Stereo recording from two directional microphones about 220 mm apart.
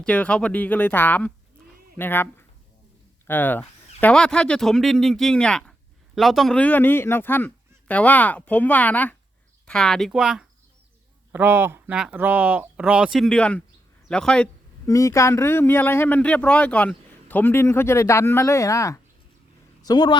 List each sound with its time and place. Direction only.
0.0 s speech: 5° left (ahead or behind)